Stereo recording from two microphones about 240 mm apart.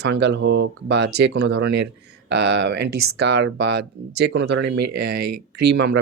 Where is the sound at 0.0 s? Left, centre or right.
Right.